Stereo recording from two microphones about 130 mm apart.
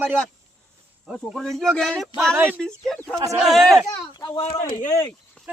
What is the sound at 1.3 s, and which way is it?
Speech, centre (ahead or behind).